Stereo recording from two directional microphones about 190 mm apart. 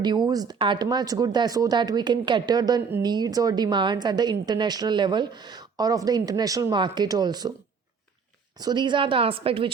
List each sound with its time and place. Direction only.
0.3 s speech: 20° right (ahead or behind)
8.5 s speech: 20° right (ahead or behind)